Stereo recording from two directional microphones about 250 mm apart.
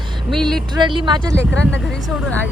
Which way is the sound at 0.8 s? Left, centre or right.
Centre.